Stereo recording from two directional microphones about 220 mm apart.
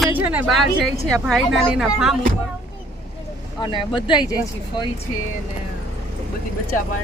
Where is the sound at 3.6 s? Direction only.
20° left (ahead or behind).